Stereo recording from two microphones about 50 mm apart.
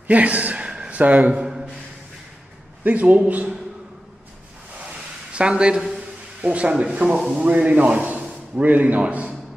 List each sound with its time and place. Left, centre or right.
0.0 s a man's voice: right
0.7 s a sound: right
1.3 s a sound: centre
2.8 s a man's voice: right
5.3 s speech: right
6.4 s a man's voice: right